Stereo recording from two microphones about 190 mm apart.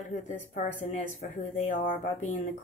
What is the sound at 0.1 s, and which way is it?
A woman's voice, 40° left (ahead or behind).